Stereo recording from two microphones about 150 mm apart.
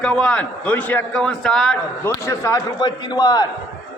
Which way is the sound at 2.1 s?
20° left (ahead or behind).